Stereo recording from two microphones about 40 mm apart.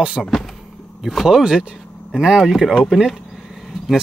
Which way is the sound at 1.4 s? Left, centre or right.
Right.